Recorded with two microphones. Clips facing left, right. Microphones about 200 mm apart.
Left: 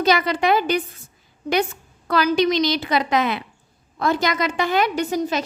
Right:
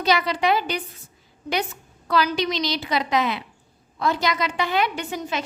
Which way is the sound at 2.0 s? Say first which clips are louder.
Left 4 dB; 50° left (ahead or behind).